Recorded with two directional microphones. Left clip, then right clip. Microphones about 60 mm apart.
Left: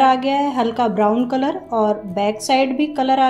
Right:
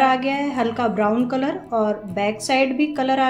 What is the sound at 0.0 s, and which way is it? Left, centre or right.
A woman's voice, left.